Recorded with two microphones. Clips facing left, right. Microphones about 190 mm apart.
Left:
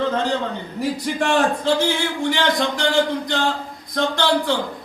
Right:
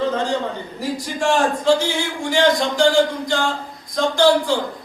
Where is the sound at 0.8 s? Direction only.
60° left (ahead or behind).